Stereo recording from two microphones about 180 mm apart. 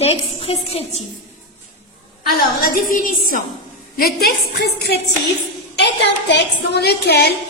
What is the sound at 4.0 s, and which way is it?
A woman's voice, 60° left (ahead or behind).